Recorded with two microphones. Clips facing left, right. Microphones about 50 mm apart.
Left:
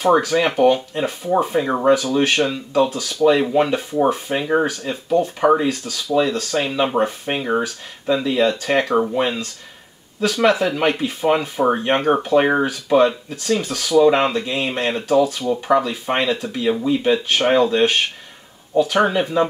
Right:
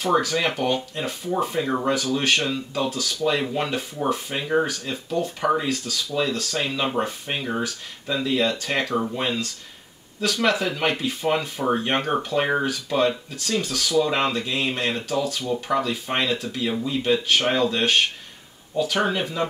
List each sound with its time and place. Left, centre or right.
0.0 s speech: left
7.4 s speech: left
15.4 s speech: left